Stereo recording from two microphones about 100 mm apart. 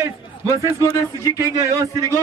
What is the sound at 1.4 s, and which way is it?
Speech, 30° right (ahead or behind).